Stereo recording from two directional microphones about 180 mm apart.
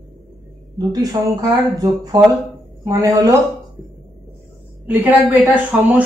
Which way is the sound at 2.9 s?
15° right (ahead or behind).